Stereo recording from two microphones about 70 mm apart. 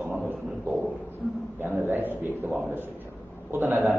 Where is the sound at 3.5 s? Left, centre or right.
Right.